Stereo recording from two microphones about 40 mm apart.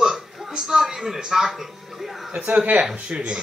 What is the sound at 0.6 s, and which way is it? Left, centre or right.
Speech, centre.